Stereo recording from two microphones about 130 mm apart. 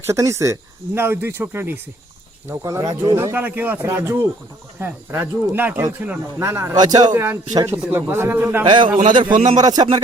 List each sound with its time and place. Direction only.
0.0 s speech: 20° right (ahead or behind)
3.2 s speech: 15° right (ahead or behind)
8.6 s a man's voice: 35° right (ahead or behind)